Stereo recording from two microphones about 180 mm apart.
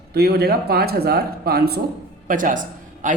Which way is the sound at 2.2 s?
45° right (ahead or behind).